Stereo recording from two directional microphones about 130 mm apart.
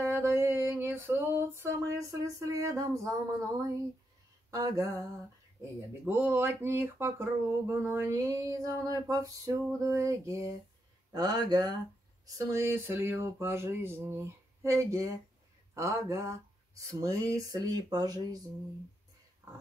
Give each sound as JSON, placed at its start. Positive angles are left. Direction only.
{"t": 0.0, "sound": "a sound", "side_deg": -20}
{"t": 4.5, "sound": "speech", "side_deg": -25}
{"t": 6.0, "sound": "speech", "side_deg": -15}
{"t": 19.4, "sound": "dog", "side_deg": -25}